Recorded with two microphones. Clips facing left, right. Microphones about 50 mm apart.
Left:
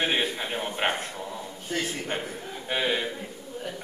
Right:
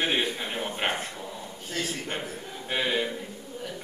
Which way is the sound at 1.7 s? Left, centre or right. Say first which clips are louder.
Left 2 dB; centre.